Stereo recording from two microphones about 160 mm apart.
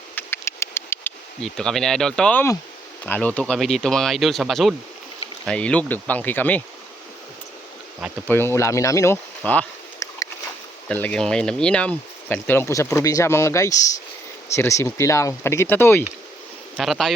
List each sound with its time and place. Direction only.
0.2 s a sound: 15° left (ahead or behind)
1.4 s speech: 5° left (ahead or behind)
8.3 s speech: 15° left (ahead or behind)
10.8 s speech: 10° left (ahead or behind)
16.7 s speech: centre (ahead or behind)